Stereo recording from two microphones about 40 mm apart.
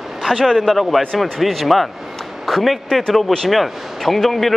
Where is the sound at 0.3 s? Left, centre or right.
Centre.